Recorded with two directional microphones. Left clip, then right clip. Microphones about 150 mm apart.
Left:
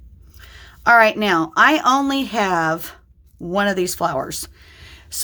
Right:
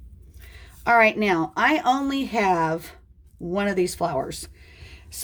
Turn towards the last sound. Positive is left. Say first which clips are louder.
# left 8 dB
turn(degrees=35)  # may be behind; listen again after turning